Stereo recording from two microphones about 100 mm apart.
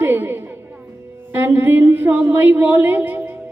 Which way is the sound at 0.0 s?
25° right (ahead or behind).